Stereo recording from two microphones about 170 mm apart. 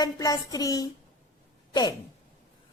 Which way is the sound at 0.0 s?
20° left (ahead or behind).